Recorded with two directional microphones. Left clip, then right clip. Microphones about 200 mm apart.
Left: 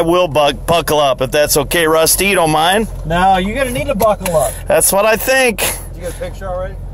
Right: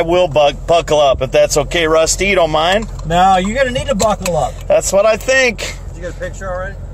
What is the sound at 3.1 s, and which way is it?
Speech, centre (ahead or behind).